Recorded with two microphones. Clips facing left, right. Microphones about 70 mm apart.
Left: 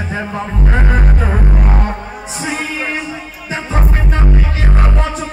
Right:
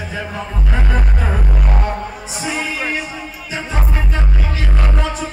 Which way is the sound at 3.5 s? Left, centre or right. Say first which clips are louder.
Left 5 dB; left.